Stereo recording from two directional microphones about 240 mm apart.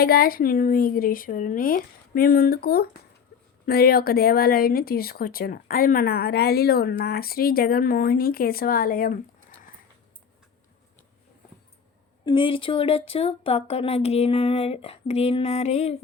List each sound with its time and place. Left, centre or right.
0.0 s speech: left
12.2 s speech: centre